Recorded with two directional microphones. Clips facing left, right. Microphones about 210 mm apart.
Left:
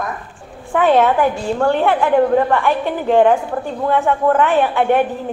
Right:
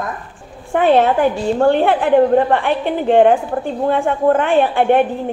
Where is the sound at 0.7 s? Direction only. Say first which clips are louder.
Right 1 dB; 25° right (ahead or behind).